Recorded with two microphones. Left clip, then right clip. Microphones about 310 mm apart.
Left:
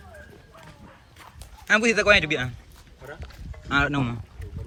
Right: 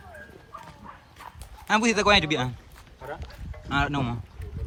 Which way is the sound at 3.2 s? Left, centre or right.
Centre.